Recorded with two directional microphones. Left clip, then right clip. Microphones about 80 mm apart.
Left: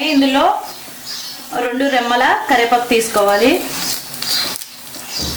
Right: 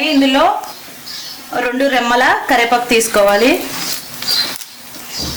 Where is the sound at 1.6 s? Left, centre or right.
Right.